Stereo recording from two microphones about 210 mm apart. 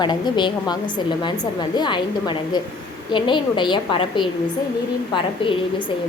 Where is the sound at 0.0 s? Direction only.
20° left (ahead or behind).